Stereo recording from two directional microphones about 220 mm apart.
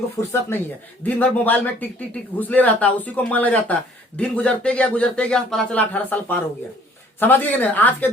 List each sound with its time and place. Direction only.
0.2 s a man's voice: 10° left (ahead or behind)